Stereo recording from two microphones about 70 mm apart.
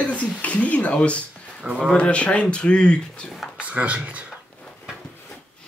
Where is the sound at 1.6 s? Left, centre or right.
Centre.